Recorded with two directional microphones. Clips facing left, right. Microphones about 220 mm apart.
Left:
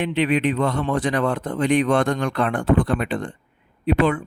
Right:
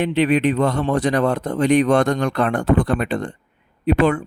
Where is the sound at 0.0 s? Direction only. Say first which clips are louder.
Right 3 dB; 40° right (ahead or behind).